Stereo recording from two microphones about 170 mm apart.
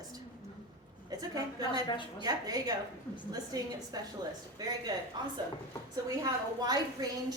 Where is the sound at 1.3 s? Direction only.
20° right (ahead or behind).